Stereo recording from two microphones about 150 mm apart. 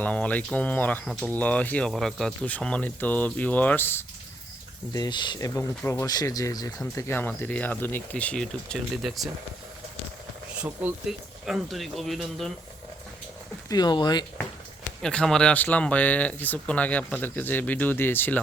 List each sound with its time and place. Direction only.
0.0 s speech: 10° left (ahead or behind)
4.9 s speech: 30° left (ahead or behind)
6.9 s speech: 15° left (ahead or behind)
10.6 s speech: 5° right (ahead or behind)
13.7 s speech: 30° left (ahead or behind)
15.0 s speech: 5° left (ahead or behind)